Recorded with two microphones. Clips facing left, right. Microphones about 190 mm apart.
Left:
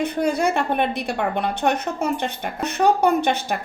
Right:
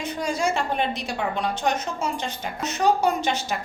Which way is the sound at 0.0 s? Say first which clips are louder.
Left 5 dB; 60° left (ahead or behind).